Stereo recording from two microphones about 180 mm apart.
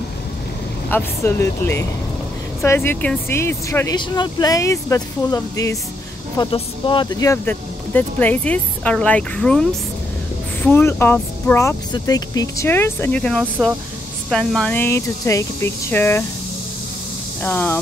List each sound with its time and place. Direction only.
0.8 s speech: 15° left (ahead or behind)
17.4 s speech: 10° left (ahead or behind)